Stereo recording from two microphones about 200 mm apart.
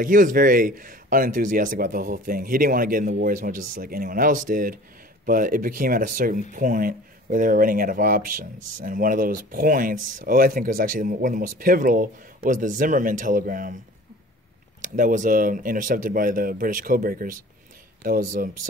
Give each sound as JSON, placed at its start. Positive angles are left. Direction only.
{"t": 0.0, "sound": "speech", "side_deg": -40}
{"t": 14.8, "sound": "speech", "side_deg": -40}